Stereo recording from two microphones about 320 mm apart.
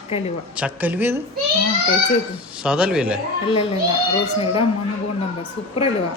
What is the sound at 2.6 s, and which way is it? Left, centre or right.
Speech, centre.